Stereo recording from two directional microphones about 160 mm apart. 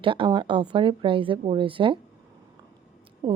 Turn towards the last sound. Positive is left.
turn(degrees=-30)  # may be behind; listen again after turning